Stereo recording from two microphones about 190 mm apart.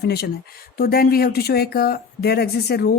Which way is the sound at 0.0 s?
55° left (ahead or behind).